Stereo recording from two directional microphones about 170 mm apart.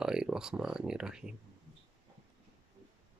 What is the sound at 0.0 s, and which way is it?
Speech, 5° right (ahead or behind).